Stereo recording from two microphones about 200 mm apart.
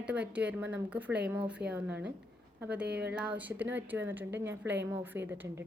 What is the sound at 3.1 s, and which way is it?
A woman's voice, 5° right (ahead or behind).